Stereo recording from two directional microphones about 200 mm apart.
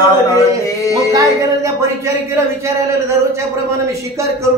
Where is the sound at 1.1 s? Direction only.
15° right (ahead or behind).